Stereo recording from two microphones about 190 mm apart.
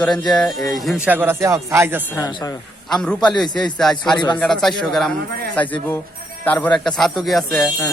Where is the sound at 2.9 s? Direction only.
5° left (ahead or behind).